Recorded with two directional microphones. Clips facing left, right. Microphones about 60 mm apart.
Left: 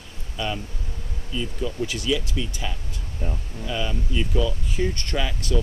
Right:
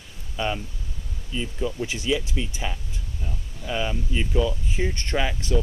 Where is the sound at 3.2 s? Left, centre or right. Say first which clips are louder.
Left 6 dB; left.